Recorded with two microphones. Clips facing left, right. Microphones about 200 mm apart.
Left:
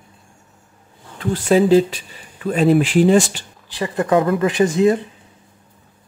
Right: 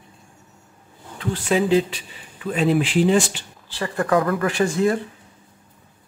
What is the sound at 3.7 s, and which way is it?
Speech, 20° left (ahead or behind).